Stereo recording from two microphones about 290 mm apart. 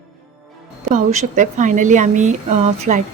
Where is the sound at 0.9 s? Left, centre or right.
Right.